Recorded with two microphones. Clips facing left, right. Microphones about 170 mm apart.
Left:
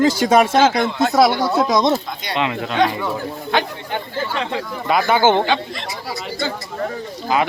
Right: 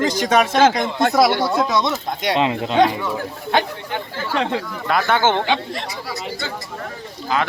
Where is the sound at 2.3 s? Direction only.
30° right (ahead or behind).